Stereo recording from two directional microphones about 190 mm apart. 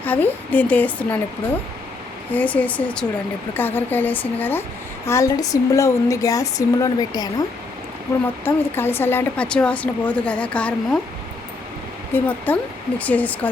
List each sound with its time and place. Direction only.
0.0 s speech: 10° left (ahead or behind)
2.3 s speech: 10° left (ahead or behind)
12.1 s speech: 10° left (ahead or behind)